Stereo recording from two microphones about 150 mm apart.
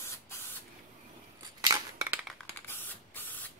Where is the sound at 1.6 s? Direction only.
20° right (ahead or behind).